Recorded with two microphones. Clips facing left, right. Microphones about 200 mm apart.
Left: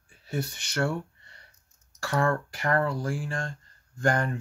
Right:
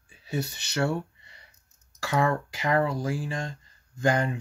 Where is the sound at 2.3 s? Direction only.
10° right (ahead or behind).